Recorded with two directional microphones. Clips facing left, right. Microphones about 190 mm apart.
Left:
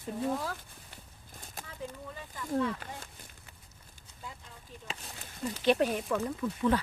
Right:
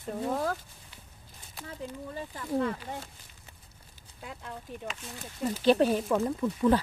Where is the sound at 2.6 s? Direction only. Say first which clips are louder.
Right 2 dB; 50° right (ahead or behind).